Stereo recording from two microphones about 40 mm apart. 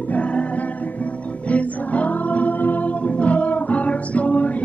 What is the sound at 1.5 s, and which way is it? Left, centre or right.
Music, left.